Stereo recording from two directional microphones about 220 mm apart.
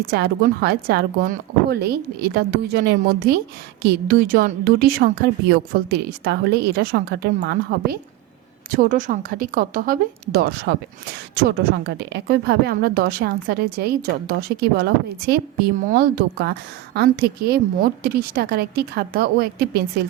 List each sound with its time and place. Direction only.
0.1 s a woman's voice: 45° right (ahead or behind)